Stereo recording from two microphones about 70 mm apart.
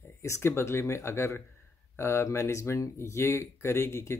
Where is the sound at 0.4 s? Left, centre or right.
Left.